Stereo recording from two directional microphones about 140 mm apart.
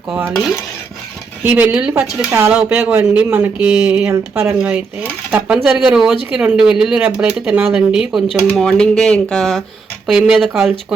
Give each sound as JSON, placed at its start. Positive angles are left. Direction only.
{"t": 0.1, "sound": "speech", "side_deg": -15}
{"t": 1.5, "sound": "speech", "side_deg": -10}
{"t": 4.1, "sound": "speech", "side_deg": -20}
{"t": 4.5, "sound": "speech", "side_deg": -10}